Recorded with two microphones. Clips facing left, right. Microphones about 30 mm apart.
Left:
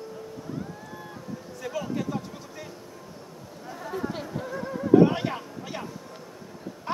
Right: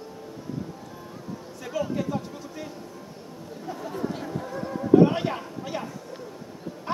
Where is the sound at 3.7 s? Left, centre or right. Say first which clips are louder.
Right 1 dB; centre.